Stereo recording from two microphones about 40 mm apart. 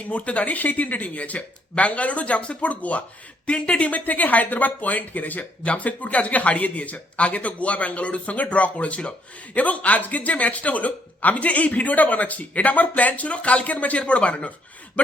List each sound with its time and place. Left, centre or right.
0.1 s speech: left